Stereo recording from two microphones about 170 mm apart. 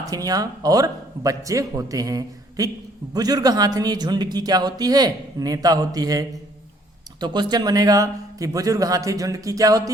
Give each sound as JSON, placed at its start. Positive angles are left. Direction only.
{"t": 0.1, "sound": "a man's voice", "side_deg": -20}